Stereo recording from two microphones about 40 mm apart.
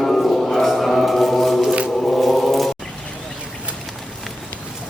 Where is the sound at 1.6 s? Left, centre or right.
Right.